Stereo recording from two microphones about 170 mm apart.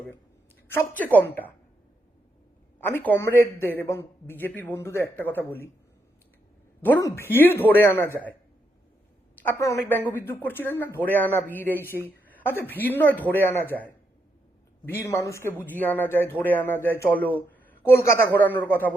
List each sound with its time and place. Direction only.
0.7 s speech: 10° left (ahead or behind)
2.8 s speech: 10° left (ahead or behind)
6.8 s speech: 15° left (ahead or behind)
9.4 s a man's voice: 15° left (ahead or behind)